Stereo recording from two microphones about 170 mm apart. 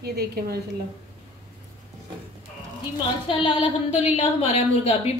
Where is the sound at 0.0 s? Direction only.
70° right (ahead or behind).